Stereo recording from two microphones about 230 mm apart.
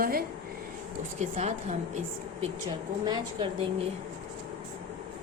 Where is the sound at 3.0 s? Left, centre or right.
Centre.